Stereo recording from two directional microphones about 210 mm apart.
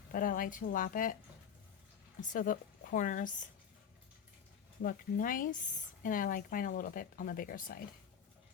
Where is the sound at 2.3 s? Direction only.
40° left (ahead or behind).